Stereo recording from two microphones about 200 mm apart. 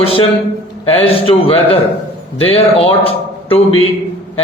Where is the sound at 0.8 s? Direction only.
30° left (ahead or behind).